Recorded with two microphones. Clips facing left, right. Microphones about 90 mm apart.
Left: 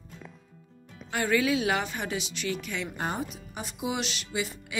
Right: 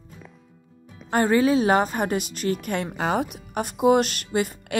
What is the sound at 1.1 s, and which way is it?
A woman's voice, 35° right (ahead or behind).